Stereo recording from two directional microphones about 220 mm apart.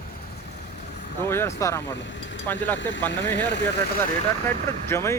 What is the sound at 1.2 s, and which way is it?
Speech, 10° left (ahead or behind).